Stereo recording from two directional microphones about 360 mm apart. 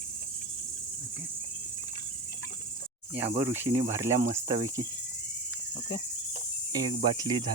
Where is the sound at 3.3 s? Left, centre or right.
Centre.